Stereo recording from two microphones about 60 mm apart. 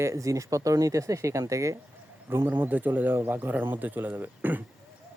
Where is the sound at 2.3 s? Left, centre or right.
Right.